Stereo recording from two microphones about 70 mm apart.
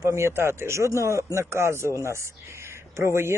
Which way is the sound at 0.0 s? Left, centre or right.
Right.